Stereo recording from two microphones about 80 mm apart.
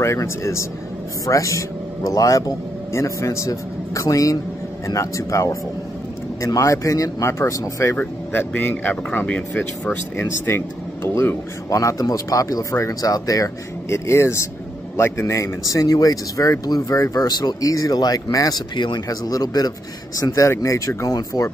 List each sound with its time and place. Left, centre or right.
0.0 s a man's voice: left
8.0 s speech: left
11.1 s a man's voice: left
20.3 s speech: left